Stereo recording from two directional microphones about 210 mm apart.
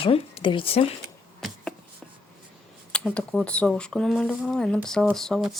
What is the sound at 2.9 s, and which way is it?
Speech, 5° left (ahead or behind).